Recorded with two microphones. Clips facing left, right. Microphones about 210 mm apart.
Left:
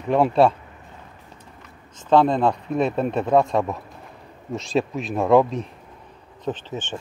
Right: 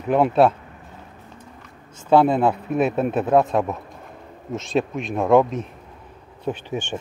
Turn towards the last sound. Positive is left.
turn(degrees=-15)  # may be behind; listen again after turning